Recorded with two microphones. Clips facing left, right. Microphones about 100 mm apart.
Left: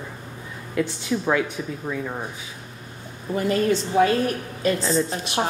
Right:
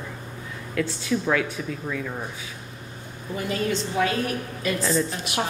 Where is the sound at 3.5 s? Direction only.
35° left (ahead or behind).